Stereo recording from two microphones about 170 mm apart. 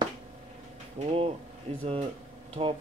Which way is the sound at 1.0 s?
35° right (ahead or behind).